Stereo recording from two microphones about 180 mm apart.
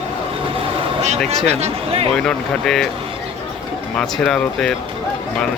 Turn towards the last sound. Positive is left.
turn(degrees=5)  # may be behind; listen again after turning